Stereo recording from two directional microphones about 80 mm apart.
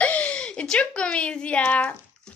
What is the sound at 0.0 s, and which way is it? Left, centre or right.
A woman's voice, centre.